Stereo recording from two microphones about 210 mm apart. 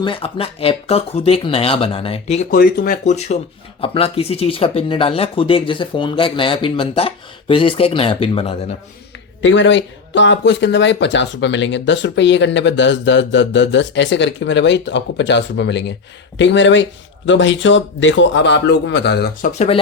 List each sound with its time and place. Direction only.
0.0 s speech: 25° left (ahead or behind)
9.4 s speech: 65° left (ahead or behind)
19.5 s speech: 30° left (ahead or behind)